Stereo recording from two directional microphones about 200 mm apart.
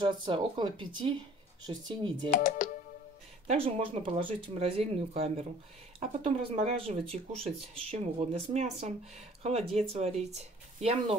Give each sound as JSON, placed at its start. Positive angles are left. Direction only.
{"t": 0.0, "sound": "speech", "side_deg": -25}
{"t": 2.3, "sound": "speech", "side_deg": 40}
{"t": 3.4, "sound": "speech", "side_deg": -30}